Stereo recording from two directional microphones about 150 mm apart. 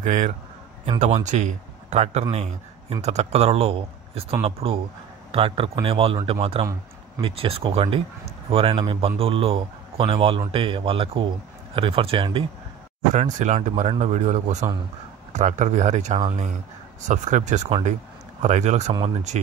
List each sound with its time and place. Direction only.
0.0 s a man's voice: 55° right (ahead or behind); by 12.4 s 35° right (ahead or behind)
13.1 s a man's voice: 50° right (ahead or behind)